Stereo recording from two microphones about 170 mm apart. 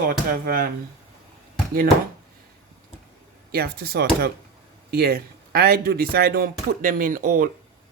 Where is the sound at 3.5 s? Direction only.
70° right (ahead or behind); by 7.5 s 55° right (ahead or behind).